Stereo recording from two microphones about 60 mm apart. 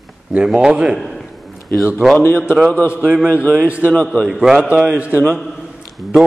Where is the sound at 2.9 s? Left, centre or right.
Right.